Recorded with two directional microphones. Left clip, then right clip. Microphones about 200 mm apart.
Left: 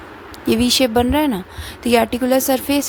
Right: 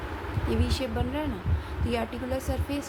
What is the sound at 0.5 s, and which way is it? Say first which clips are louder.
A woman's voice: left 16 dB; 60° left (ahead or behind).